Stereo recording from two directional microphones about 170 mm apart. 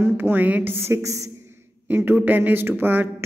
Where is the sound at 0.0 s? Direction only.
10° right (ahead or behind).